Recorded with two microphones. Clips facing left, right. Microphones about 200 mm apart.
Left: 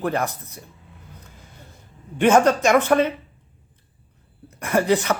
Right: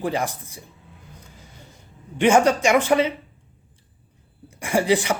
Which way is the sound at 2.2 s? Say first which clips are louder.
Left 1 dB; 10° right (ahead or behind).